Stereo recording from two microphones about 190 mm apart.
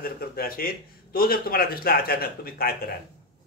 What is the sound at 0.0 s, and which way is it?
A man's voice, 50° left (ahead or behind).